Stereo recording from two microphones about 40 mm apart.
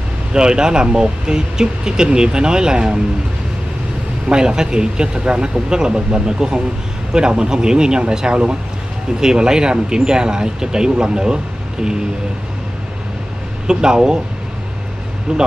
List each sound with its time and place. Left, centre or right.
0.3 s speech: centre
4.3 s speech: centre
13.7 s speech: centre
15.3 s speech: right